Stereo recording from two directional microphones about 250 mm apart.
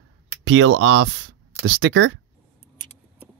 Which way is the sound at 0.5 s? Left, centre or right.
Right.